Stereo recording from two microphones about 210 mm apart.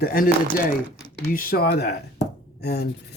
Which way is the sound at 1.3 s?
45° left (ahead or behind).